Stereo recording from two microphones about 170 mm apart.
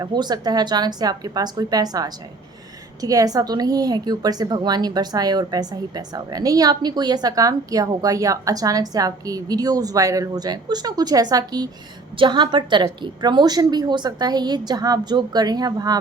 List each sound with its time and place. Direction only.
0.0 s a woman's voice: 25° right (ahead or behind)